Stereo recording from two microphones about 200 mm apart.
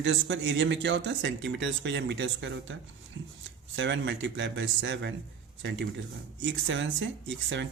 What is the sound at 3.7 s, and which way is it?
Speech, 65° right (ahead or behind).